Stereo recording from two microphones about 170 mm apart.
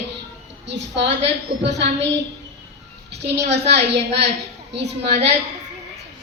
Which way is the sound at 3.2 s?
75° right (ahead or behind).